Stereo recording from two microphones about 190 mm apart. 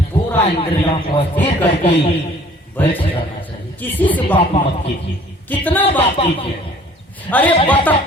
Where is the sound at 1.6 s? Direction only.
30° left (ahead or behind).